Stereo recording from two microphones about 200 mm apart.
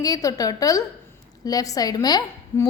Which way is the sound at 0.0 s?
15° left (ahead or behind).